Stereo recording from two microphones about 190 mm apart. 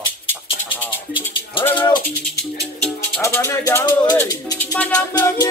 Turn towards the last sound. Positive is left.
turn(degrees=15)  # may be behind; listen again after turning